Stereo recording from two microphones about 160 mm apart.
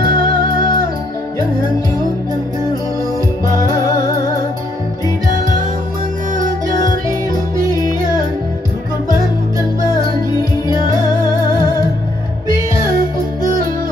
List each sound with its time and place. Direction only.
0.0 s music: 60° right (ahead or behind)